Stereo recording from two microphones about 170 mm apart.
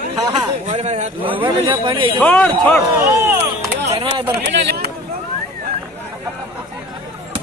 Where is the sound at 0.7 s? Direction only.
40° right (ahead or behind).